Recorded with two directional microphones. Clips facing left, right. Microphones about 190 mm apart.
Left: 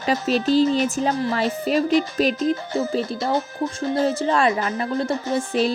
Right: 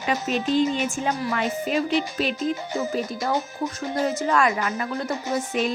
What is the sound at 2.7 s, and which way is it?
Speech, 30° left (ahead or behind).